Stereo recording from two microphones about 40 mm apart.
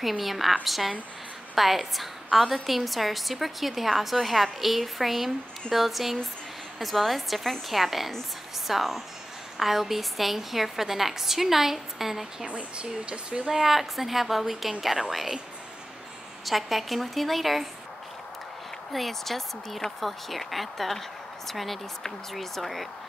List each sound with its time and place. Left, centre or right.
0.2 s a woman's voice: centre
12.4 s speech: right
13.5 s a woman's voice: centre
16.4 s a woman's voice: centre
18.9 s a woman's voice: centre